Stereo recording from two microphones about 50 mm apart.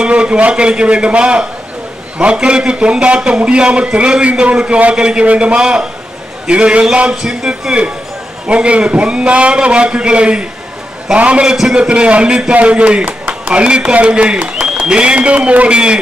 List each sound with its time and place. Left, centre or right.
0.0 s a man's voice: right